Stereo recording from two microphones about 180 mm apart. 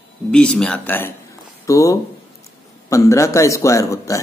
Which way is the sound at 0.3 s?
5° left (ahead or behind).